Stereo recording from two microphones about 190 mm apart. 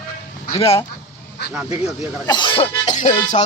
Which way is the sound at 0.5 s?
30° left (ahead or behind).